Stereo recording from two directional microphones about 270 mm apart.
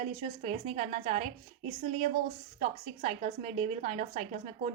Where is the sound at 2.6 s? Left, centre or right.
Right.